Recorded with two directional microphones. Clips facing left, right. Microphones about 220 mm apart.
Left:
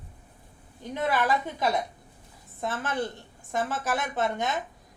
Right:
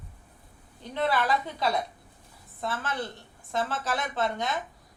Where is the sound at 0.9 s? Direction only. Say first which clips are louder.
Even; 15° left (ahead or behind).